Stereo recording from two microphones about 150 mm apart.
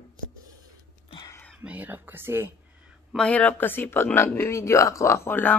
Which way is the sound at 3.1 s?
5° left (ahead or behind).